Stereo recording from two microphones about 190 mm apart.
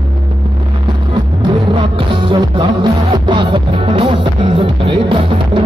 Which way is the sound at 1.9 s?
25° right (ahead or behind).